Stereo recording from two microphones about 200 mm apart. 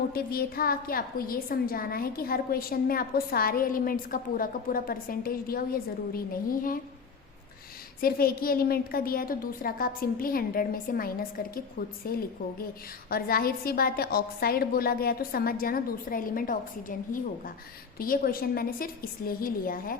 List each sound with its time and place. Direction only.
0.1 s a woman's voice: 50° left (ahead or behind)
8.0 s a woman's voice: 50° left (ahead or behind)
17.9 s a woman's voice: 45° left (ahead or behind)